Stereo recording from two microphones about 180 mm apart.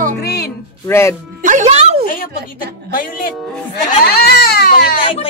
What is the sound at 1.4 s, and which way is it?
Music, 40° right (ahead or behind).